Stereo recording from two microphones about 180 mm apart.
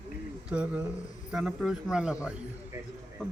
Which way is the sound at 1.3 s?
Centre (ahead or behind).